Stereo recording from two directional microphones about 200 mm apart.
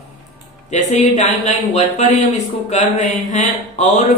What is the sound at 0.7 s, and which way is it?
A man's voice, 35° left (ahead or behind).